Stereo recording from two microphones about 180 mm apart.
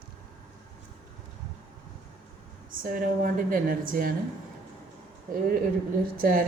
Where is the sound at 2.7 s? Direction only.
50° right (ahead or behind).